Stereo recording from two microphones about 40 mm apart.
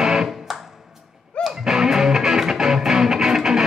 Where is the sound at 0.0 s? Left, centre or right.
Centre.